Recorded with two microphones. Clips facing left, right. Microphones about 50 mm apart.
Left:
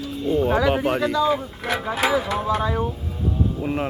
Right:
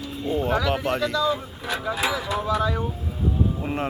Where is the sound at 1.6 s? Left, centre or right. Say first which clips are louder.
Left 4 dB; left.